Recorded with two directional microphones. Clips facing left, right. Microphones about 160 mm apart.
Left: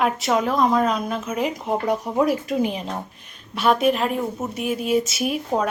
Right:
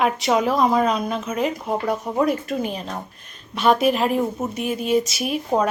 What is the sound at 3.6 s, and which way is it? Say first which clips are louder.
A woman's voice: right 1 dB; centre (ahead or behind).